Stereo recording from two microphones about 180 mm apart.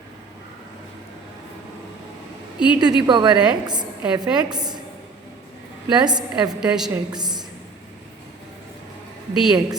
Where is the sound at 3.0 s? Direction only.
25° right (ahead or behind).